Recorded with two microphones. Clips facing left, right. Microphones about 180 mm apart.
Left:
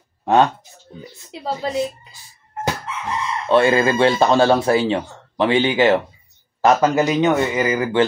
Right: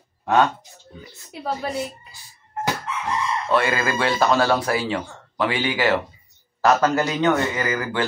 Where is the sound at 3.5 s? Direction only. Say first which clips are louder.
Left 7 dB; 25° left (ahead or behind).